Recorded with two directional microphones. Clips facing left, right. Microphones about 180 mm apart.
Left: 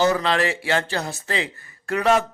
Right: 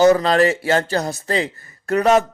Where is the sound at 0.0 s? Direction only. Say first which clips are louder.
Right 7 dB; 40° right (ahead or behind).